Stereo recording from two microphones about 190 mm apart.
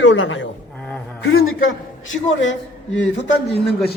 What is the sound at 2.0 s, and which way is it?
Speech, 85° left.